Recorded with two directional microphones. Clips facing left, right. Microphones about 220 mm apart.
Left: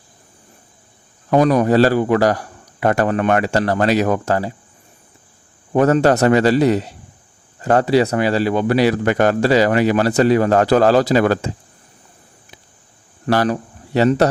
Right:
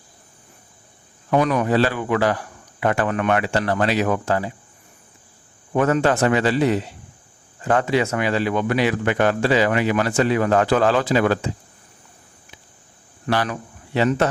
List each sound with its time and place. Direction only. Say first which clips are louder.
1.3 s a man's voice: left 5 dB; 35° left (ahead or behind)
5.7 s a man's voice: left 5 dB; 40° left (ahead or behind)
13.2 s a man's voice: left 6 dB; 40° left (ahead or behind)